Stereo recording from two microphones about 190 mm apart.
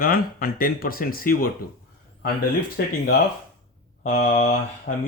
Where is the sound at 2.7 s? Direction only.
50° left (ahead or behind).